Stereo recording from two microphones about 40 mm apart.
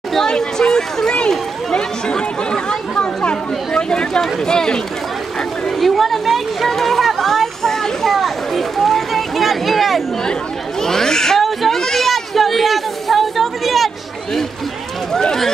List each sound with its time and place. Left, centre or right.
0.1 s speech: centre
1.3 s chatter: centre
4.5 s speech: centre
5.8 s a sound: centre
10.8 s speech: centre
11.4 s a sound: centre